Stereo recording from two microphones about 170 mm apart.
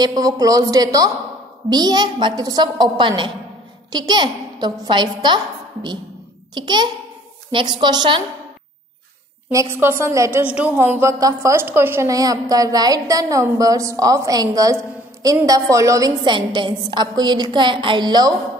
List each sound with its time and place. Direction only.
0.0 s a woman's voice: 20° right (ahead or behind)
9.5 s a woman's voice: 15° right (ahead or behind)